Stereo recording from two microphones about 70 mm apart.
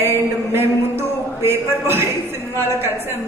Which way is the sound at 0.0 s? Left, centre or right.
Right.